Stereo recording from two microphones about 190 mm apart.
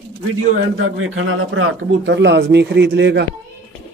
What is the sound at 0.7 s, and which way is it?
A man's voice, 90° right.